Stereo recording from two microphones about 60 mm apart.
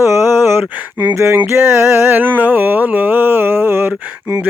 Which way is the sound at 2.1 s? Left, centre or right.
Right.